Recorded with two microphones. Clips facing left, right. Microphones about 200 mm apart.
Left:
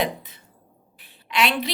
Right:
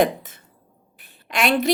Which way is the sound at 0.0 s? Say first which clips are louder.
Right 6 dB; 45° right (ahead or behind).